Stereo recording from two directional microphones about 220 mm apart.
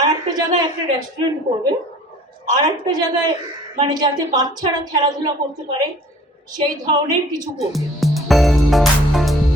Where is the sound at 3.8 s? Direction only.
20° right (ahead or behind).